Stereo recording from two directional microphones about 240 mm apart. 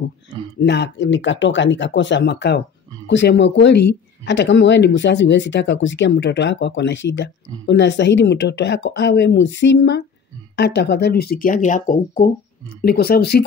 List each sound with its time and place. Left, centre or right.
0.3 s speech: left